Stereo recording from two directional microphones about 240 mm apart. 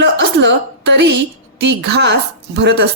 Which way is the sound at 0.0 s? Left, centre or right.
Right.